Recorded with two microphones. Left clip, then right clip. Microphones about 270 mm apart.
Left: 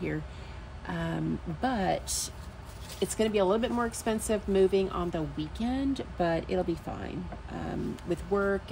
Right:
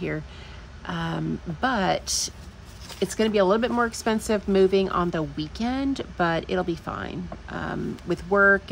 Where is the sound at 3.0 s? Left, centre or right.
Right.